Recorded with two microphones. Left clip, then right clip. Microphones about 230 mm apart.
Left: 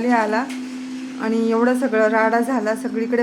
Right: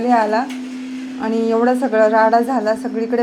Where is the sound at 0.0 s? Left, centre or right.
Centre.